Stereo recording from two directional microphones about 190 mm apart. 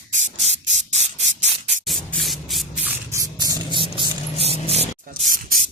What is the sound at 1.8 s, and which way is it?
Spray, centre (ahead or behind).